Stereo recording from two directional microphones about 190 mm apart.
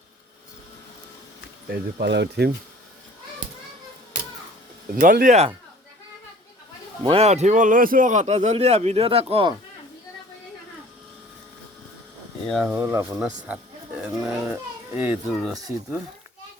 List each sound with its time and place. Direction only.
1.7 s speech: 60° right (ahead or behind)
4.9 s a man's voice: 45° right (ahead or behind)
7.0 s a man's voice: 30° right (ahead or behind)
12.5 s speech: centre (ahead or behind)
12.7 s a child's voice: 15° right (ahead or behind)
14.3 s a child's voice: 10° right (ahead or behind)
15.5 s speech: 20° right (ahead or behind)